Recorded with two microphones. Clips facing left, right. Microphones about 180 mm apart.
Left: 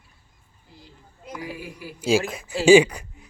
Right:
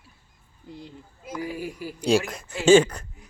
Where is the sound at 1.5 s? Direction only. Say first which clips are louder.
Right 4 dB; 45° right (ahead or behind).